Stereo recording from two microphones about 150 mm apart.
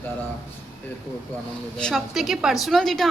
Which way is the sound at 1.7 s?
5° left (ahead or behind).